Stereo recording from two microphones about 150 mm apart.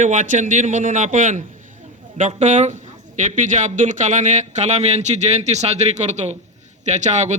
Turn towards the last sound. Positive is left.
turn(degrees=-50)  # may be behind; listen again after turning